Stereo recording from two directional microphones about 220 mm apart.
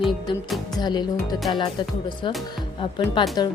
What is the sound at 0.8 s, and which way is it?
Speech, 20° left (ahead or behind).